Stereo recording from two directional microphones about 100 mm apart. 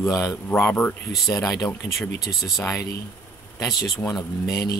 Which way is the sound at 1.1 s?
Centre (ahead or behind).